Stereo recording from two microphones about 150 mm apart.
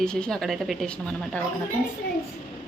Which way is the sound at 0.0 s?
5° left (ahead or behind).